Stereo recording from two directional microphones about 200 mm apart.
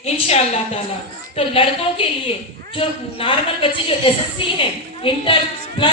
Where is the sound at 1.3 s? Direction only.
30° left (ahead or behind).